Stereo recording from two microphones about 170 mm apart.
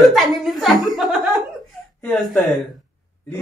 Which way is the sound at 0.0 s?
Centre (ahead or behind).